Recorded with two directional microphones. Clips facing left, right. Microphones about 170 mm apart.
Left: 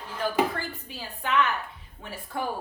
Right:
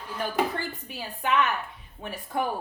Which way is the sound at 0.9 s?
15° right (ahead or behind).